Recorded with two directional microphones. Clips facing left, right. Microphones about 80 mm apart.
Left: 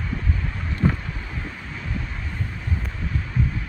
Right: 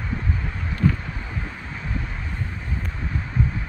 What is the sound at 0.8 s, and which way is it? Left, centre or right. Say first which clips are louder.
Vehicle: right 1 dB; left.